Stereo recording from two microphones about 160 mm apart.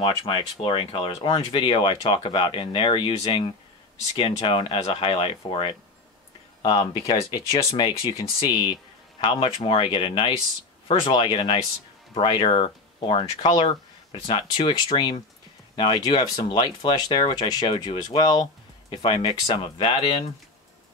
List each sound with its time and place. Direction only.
0.0 s speech: 30° left (ahead or behind)
7.5 s speech: 30° left (ahead or behind)